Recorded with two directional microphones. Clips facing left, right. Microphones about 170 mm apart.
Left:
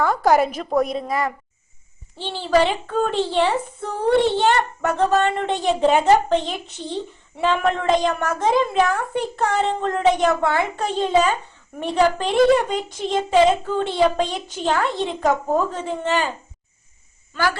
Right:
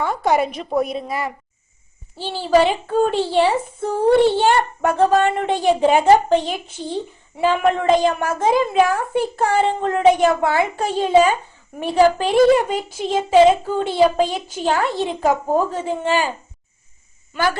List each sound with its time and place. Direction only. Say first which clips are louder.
0.0 s a woman's voice: left 1 dB; centre (ahead or behind)
17.3 s a woman's voice: right 2 dB; 20° right (ahead or behind)